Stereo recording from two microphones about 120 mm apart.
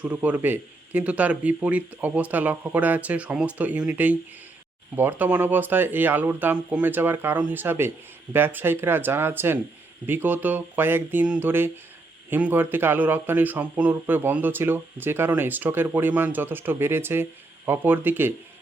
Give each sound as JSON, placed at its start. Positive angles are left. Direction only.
{"t": 0.0, "sound": "speech", "side_deg": -15}